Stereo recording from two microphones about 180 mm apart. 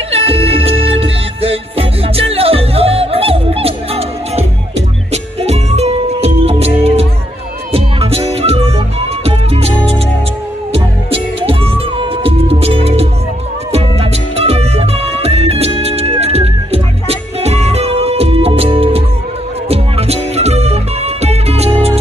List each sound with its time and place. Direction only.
0.1 s music: 30° right (ahead or behind)